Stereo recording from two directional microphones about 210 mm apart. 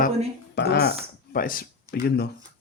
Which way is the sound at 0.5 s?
50° left (ahead or behind).